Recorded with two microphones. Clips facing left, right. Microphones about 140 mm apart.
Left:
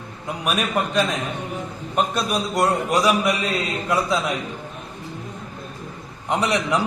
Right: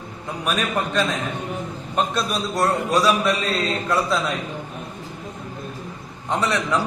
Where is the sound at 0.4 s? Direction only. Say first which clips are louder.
Left 1 dB; 10° left (ahead or behind).